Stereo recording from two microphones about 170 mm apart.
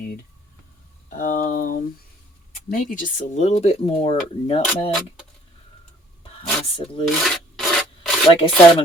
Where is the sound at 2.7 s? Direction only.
50° left (ahead or behind); by 4.6 s 35° left (ahead or behind).